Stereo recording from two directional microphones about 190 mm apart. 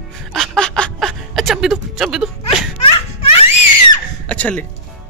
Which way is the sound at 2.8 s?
30° left (ahead or behind).